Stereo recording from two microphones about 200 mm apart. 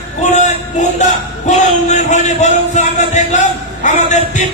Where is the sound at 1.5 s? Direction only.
35° left (ahead or behind).